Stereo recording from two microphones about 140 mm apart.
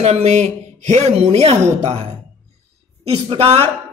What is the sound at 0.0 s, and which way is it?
Speech, 50° right (ahead or behind).